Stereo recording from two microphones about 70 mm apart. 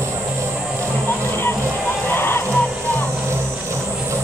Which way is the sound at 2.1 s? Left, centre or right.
Left.